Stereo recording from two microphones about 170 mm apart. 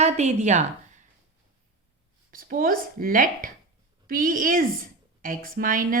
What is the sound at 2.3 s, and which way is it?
A woman's voice, 55° right (ahead or behind).